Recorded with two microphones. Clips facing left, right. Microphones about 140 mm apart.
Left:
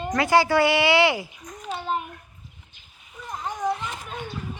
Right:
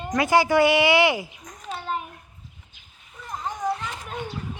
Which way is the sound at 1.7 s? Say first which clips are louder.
Left 2 dB; centre (ahead or behind).